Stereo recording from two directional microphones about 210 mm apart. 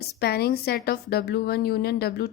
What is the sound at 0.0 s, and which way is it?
A woman's voice, 50° left (ahead or behind).